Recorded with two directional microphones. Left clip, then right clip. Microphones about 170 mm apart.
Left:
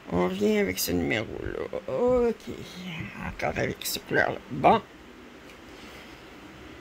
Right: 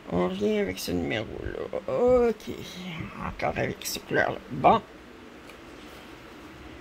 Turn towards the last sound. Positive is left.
turn(degrees=20)  # may be behind; listen again after turning